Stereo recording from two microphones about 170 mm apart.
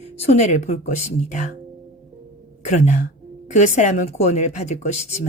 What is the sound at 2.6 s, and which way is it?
A woman's voice, 45° left (ahead or behind).